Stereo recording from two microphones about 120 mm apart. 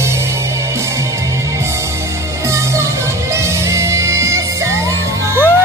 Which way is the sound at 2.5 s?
25° right (ahead or behind).